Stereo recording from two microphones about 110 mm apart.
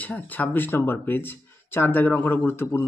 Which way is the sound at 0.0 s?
15° left (ahead or behind).